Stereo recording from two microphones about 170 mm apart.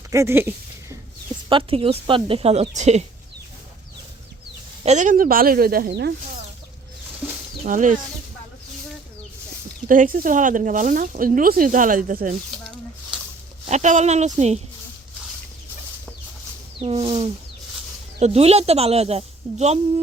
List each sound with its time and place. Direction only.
0.1 s speech: 15° right (ahead or behind)
1.5 s speech: 30° right (ahead or behind)
4.9 s speech: 45° right (ahead or behind); by 6.1 s 85° right
7.6 s speech: 50° right (ahead or behind)
9.9 s speech: 50° right (ahead or behind)
13.7 s speech: 45° right (ahead or behind)
16.8 s speech: 35° right (ahead or behind)